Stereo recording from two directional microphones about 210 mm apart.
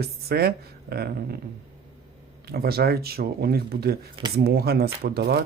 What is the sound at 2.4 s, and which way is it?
Speech, 50° right (ahead or behind).